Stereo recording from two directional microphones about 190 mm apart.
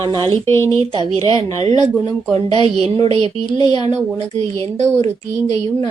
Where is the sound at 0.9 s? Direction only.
25° right (ahead or behind).